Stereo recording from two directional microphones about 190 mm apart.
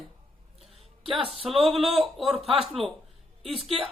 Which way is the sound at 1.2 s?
30° right (ahead or behind).